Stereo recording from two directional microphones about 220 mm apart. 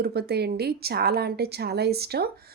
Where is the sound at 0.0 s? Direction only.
45° right (ahead or behind).